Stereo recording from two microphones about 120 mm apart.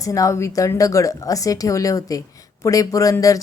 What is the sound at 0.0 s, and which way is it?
Speech, 30° left (ahead or behind).